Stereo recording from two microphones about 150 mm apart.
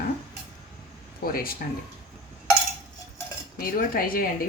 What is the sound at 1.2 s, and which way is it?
Speech, 80° left.